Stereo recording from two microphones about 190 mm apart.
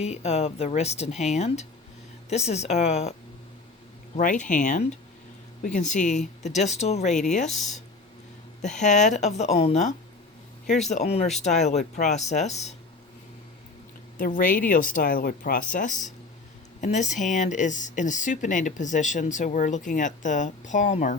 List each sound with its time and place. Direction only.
0.0 s a woman's voice: 35° left (ahead or behind)
8.6 s a woman's voice: 40° left (ahead or behind)
14.2 s a woman's voice: 45° left (ahead or behind)